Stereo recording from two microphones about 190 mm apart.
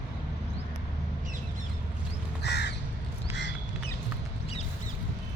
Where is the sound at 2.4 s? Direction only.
60° left (ahead or behind).